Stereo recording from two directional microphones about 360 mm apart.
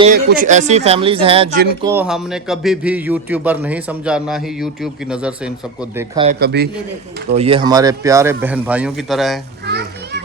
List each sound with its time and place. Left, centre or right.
0.0 s a man's voice: right
1.8 s a man's voice: centre
6.4 s a man's voice: right
7.3 s a man's voice: centre
9.6 s children playing: right